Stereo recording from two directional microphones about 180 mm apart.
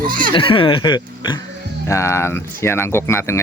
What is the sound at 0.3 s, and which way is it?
Speech, 30° left (ahead or behind).